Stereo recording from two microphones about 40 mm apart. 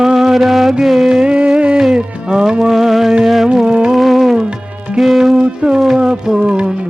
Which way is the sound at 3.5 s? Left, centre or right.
Right.